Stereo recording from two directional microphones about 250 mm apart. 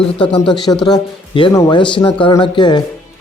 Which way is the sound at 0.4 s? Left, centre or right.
Centre.